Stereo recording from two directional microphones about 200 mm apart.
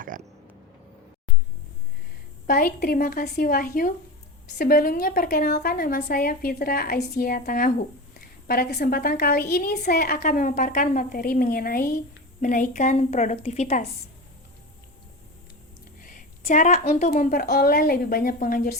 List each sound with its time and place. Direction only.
0.1 s a sound: 45° right (ahead or behind)
2.5 s a woman's voice: 45° left (ahead or behind)
16.0 s a woman's voice: 40° left (ahead or behind)